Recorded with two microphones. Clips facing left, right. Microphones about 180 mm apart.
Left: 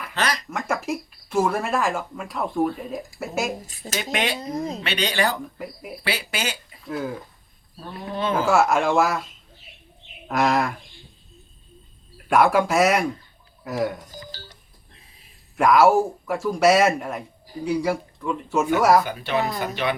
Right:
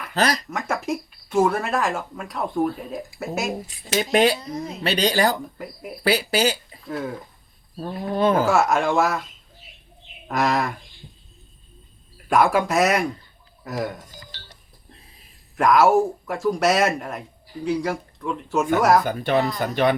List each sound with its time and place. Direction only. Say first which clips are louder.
0.1 s speech: right 4 dB; 40° right (ahead or behind)
0.5 s speech: even; centre (ahead or behind)
3.9 s speech: right 7 dB; 40° right (ahead or behind)
4.4 s speech: left 3 dB; 40° left (ahead or behind)
4.8 s speech: right 7 dB; 40° right (ahead or behind)
6.8 s speech: even; centre (ahead or behind)
7.8 s speech: right 6 dB; 40° right (ahead or behind)
8.4 s speech: even; centre (ahead or behind)
10.2 s speech: left 1 dB; centre (ahead or behind)
12.1 s speech: left 1 dB; centre (ahead or behind)
14.3 s telephone dialing: left 5 dB; 40° left (ahead or behind)
15.5 s speech: even; centre (ahead or behind)
19.0 s speech: right 4 dB; 45° right (ahead or behind)